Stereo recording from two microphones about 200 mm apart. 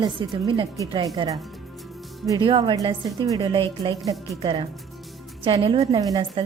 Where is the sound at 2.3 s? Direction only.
25° right (ahead or behind).